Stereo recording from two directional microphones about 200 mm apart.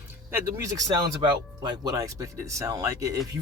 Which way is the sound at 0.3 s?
10° right (ahead or behind).